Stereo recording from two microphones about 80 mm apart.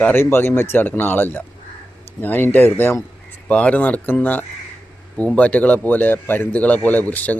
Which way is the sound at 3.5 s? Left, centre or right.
Centre.